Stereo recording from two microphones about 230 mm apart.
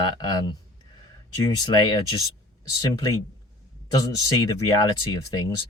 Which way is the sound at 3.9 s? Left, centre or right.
Centre.